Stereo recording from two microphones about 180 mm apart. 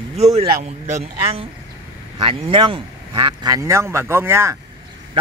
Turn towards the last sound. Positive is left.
turn(degrees=-15)  # may be behind; listen again after turning